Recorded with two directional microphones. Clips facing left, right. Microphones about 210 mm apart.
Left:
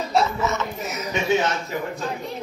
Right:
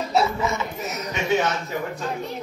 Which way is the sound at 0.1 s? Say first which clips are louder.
Even; 10° right (ahead or behind).